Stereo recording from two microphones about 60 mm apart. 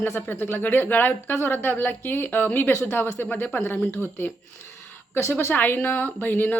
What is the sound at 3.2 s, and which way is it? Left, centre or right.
Speech, left.